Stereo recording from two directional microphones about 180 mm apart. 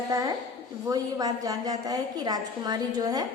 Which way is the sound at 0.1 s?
20° right (ahead or behind).